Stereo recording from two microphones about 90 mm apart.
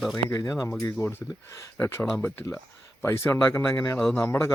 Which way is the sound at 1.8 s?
20° left (ahead or behind).